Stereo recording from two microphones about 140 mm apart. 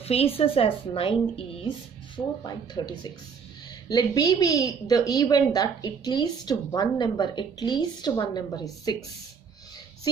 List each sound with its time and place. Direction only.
0.0 s a woman's voice: 45° left (ahead or behind)
2.1 s a woman's voice: 30° left (ahead or behind)